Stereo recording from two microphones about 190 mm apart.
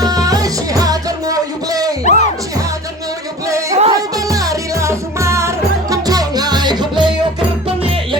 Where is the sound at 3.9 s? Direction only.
20° right (ahead or behind).